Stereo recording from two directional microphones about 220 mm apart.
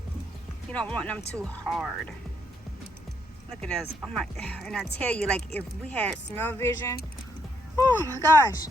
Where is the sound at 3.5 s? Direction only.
5° left (ahead or behind).